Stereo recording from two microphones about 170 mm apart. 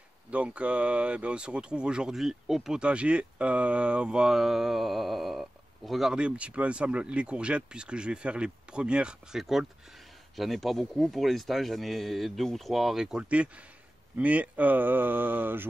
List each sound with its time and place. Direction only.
0.3 s speech: 5° right (ahead or behind)